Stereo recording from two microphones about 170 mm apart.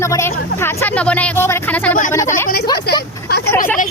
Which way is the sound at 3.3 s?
70° left (ahead or behind).